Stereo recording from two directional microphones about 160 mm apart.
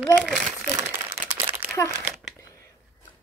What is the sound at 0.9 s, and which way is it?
Crumpling, 10° right (ahead or behind).